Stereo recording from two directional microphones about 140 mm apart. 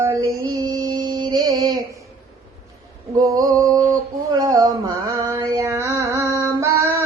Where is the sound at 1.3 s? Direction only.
30° right (ahead or behind).